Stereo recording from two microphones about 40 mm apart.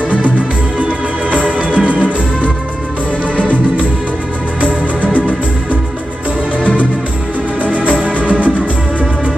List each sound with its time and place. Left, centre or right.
0.7 s music: right
4.6 s music: right
8.0 s music: right